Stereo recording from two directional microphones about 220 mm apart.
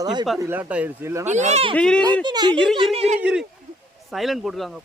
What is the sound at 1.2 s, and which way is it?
Speech, 30° right (ahead or behind).